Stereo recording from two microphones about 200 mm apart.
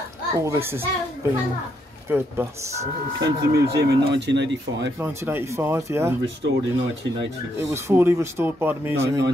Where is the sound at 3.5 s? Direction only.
60° right (ahead or behind).